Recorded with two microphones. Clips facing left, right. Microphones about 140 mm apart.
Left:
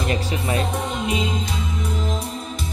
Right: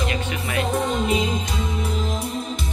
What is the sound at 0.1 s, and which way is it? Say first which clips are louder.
Music: left 3 dB; 35° left (ahead or behind).